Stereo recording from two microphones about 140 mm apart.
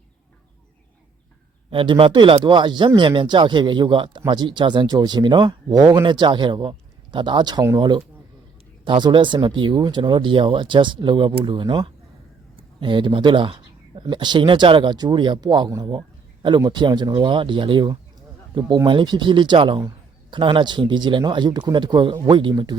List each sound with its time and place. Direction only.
1.7 s speech: 40° right (ahead or behind)